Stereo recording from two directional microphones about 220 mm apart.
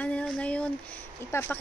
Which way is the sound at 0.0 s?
5° left (ahead or behind).